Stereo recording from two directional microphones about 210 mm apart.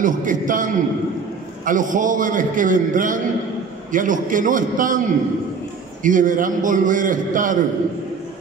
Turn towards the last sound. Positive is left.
turn(degrees=-40)  # may be behind; listen again after turning